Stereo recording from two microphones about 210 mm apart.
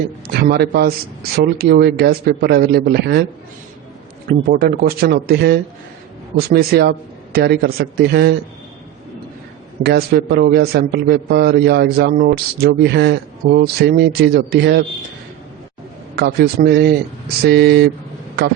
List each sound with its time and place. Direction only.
0.3 s a man's voice: 50° right (ahead or behind)
4.3 s a man's voice: 45° right (ahead or behind)
9.8 s a man's voice: 50° right (ahead or behind)
16.1 s a man's voice: 50° right (ahead or behind)